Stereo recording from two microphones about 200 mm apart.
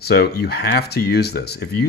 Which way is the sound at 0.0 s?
50° left (ahead or behind).